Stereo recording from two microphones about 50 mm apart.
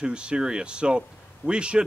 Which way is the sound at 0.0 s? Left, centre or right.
Centre.